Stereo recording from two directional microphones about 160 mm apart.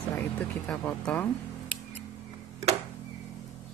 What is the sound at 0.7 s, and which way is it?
Speech, 5° left (ahead or behind).